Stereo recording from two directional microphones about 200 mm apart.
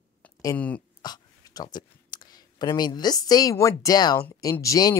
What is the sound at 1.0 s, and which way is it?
Speech, 20° left (ahead or behind).